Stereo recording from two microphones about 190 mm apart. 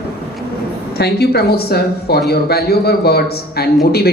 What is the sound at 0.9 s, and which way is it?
Speech, 60° left (ahead or behind).